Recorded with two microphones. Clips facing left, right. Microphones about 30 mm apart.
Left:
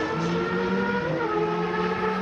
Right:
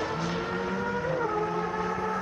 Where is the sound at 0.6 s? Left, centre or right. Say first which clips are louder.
Left 5 dB; left.